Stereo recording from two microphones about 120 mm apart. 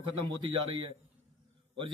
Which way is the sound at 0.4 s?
45° right (ahead or behind).